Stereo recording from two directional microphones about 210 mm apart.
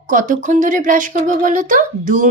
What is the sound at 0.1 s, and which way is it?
Speech, 40° right (ahead or behind).